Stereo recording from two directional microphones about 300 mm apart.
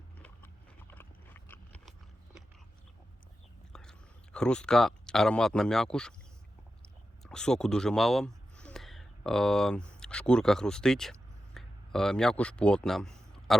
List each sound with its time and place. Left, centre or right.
0.2 s horse: centre
3.7 s a man's voice: centre